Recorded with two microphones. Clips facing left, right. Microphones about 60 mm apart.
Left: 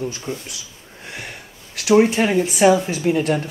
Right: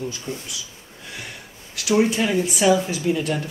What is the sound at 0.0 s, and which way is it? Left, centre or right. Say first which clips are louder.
Speech: left 3 dB; left.